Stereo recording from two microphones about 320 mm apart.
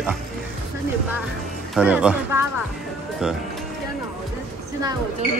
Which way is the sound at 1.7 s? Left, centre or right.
Centre.